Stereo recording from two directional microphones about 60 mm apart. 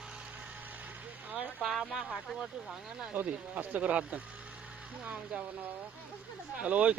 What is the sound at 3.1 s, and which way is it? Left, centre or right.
Speech, right.